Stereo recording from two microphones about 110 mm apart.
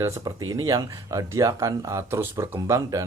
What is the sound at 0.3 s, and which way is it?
Speech, 35° right (ahead or behind).